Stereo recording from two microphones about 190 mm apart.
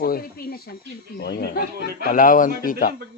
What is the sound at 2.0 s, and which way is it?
Speech, 45° left (ahead or behind).